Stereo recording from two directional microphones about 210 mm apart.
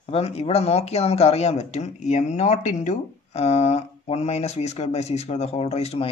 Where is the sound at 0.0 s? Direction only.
30° left (ahead or behind).